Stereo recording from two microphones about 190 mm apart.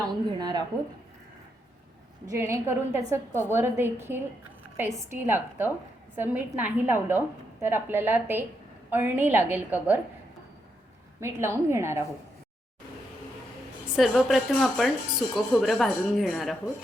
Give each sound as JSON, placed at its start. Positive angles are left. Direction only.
{"t": 0.3, "sound": "a sound", "side_deg": -20}
{"t": 2.3, "sound": "a woman's voice", "side_deg": -15}
{"t": 11.2, "sound": "a woman's voice", "side_deg": -15}
{"t": 13.9, "sound": "speech", "side_deg": 0}